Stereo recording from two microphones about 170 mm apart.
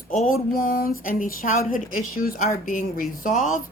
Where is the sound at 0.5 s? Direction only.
60° left (ahead or behind).